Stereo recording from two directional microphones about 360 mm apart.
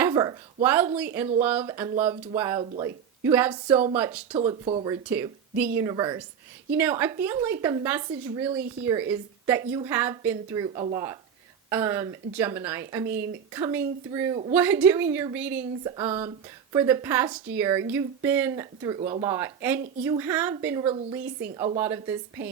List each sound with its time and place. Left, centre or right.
0.0 s a woman's voice: centre
5.0 s a woman's voice: centre